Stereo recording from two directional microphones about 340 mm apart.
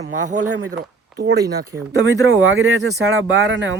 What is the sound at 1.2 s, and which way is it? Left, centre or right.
Speech, right.